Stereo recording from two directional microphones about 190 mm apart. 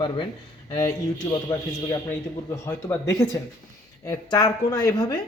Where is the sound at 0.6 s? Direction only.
15° left (ahead or behind).